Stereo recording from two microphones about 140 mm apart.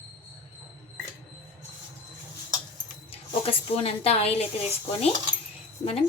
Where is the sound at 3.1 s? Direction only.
45° left (ahead or behind).